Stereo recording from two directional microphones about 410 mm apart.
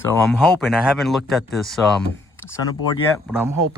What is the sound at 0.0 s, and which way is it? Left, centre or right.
Speech, centre.